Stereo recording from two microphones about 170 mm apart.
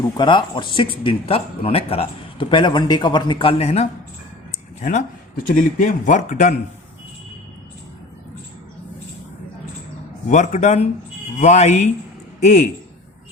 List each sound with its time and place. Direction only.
0.2 s a man's voice: 30° left (ahead or behind); by 6.5 s 45° left (ahead or behind)
10.2 s a man's voice: 45° left (ahead or behind)